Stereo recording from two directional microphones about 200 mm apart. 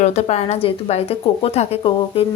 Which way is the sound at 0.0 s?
35° left (ahead or behind).